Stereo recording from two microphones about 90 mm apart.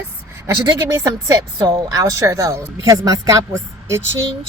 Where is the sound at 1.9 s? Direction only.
40° right (ahead or behind).